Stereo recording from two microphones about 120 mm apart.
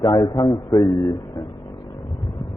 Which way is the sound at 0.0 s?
40° left (ahead or behind).